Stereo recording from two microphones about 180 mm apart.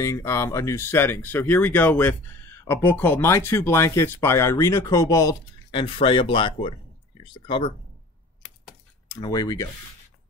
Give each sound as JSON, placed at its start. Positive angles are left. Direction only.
{"t": 0.0, "sound": "speech", "side_deg": 15}
{"t": 9.1, "sound": "speech", "side_deg": 20}